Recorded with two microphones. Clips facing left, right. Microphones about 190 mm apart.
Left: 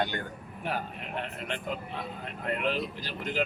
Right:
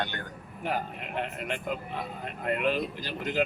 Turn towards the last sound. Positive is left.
turn(degrees=-15)  # may be behind; listen again after turning